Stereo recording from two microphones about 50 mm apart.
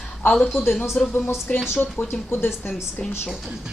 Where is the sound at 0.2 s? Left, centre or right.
Left.